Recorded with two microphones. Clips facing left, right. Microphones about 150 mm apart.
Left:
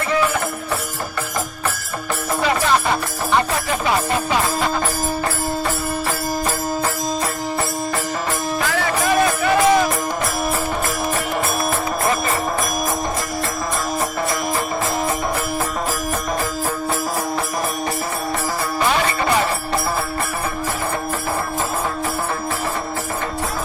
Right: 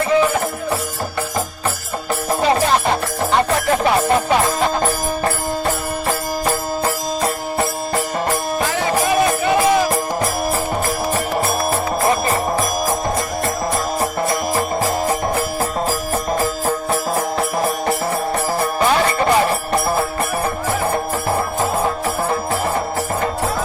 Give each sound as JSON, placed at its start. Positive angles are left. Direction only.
{"t": 9.4, "sound": "music", "side_deg": -20}